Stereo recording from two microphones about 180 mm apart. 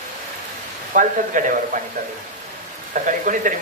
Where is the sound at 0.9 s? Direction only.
45° right (ahead or behind).